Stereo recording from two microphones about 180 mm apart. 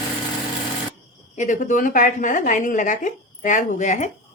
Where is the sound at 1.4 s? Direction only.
45° left (ahead or behind).